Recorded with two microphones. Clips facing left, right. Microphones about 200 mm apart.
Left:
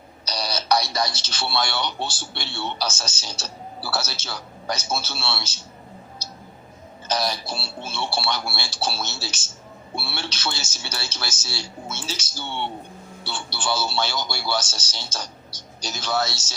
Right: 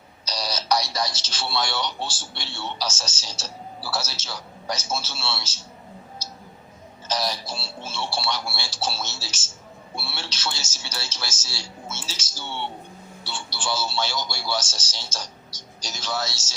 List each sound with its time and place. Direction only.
0.3 s a man's voice: 60° left (ahead or behind)
7.1 s a man's voice: 60° left (ahead or behind)